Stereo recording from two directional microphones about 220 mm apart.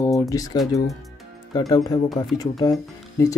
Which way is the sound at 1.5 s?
15° left (ahead or behind).